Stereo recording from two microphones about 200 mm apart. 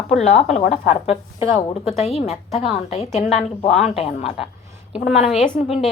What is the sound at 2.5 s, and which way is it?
Speech, centre (ahead or behind).